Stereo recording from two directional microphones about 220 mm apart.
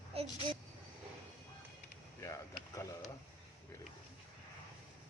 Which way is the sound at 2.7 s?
15° left (ahead or behind).